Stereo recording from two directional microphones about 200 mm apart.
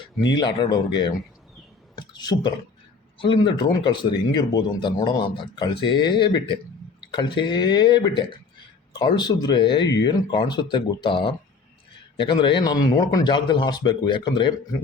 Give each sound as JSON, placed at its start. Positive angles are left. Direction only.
{"t": 0.2, "sound": "a man's voice", "side_deg": 20}
{"t": 2.0, "sound": "a sound", "side_deg": 20}
{"t": 3.2, "sound": "a man's voice", "side_deg": 25}